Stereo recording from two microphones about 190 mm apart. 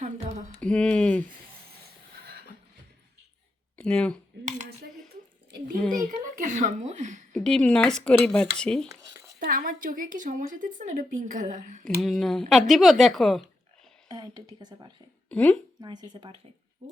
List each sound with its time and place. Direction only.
0.0 s mantra: 35° right (ahead or behind)
0.6 s speech: 5° left (ahead or behind)
3.8 s speech: 5° left (ahead or behind)
6.0 s a child's voice: 40° right (ahead or behind)
7.3 s speech: 5° left (ahead or behind)
9.4 s a woman's voice: 45° right (ahead or behind)
11.9 s speech: centre (ahead or behind)
14.1 s speech: 20° right (ahead or behind)
15.3 s speech: 5° left (ahead or behind)
15.8 s speech: 20° right (ahead or behind)